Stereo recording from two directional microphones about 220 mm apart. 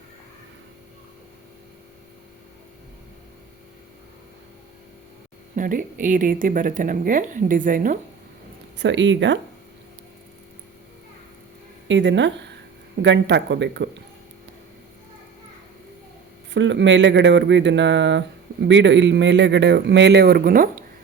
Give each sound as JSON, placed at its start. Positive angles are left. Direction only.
{"t": 5.5, "sound": "speech", "side_deg": -35}
{"t": 8.8, "sound": "speech", "side_deg": -55}
{"t": 11.9, "sound": "speech", "side_deg": -55}
{"t": 16.5, "sound": "speech", "side_deg": -55}